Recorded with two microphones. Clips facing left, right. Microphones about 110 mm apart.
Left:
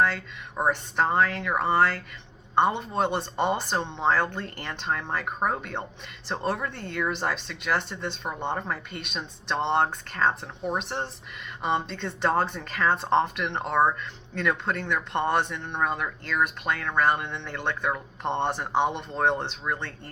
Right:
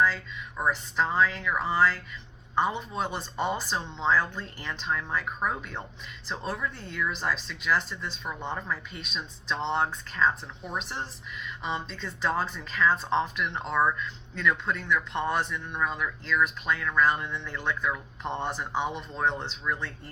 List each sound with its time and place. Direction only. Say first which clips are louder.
0.7 s a woman's voice: left 3 dB; 55° left (ahead or behind)